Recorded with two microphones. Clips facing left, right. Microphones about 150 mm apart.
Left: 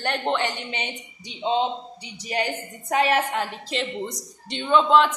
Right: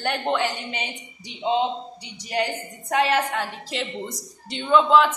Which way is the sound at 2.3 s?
Centre (ahead or behind).